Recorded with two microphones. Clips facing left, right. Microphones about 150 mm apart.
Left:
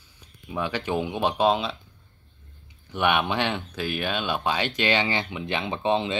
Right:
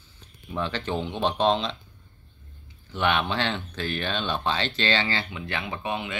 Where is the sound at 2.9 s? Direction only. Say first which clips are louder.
Left 2 dB; 15° left (ahead or behind).